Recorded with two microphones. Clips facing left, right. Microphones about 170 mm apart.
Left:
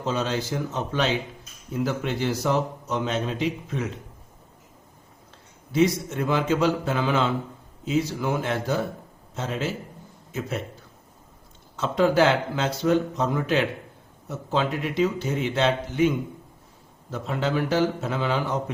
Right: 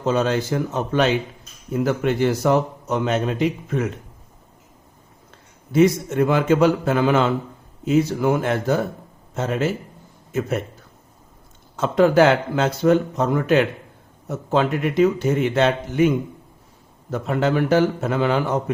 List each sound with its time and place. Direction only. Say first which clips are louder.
0.0 s a man's voice: right 6 dB; 50° right (ahead or behind)
5.7 s a man's voice: right 5 dB; 55° right (ahead or behind)
11.8 s a man's voice: right 5 dB; 50° right (ahead or behind)